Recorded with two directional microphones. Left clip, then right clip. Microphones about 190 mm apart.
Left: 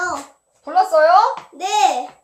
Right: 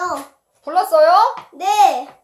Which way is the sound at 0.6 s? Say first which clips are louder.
Right 1 dB; 35° right (ahead or behind).